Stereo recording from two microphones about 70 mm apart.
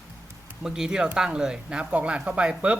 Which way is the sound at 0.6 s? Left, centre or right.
Centre.